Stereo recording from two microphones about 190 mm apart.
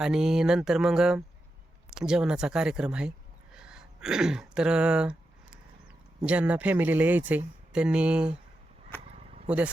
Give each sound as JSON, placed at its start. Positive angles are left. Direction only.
{"t": 0.0, "sound": "speech", "side_deg": -5}
{"t": 3.5, "sound": "throat clearing", "side_deg": -5}
{"t": 6.2, "sound": "speech", "side_deg": -5}
{"t": 9.1, "sound": "a sound", "side_deg": -35}